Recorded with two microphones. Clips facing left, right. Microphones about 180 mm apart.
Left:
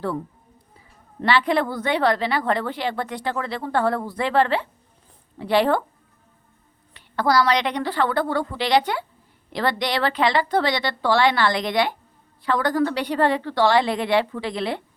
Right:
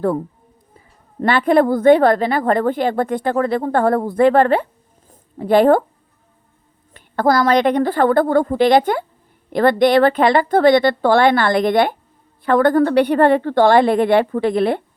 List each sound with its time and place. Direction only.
1.2 s a woman's voice: 50° right (ahead or behind)
6.9 s a woman's voice: 50° right (ahead or behind)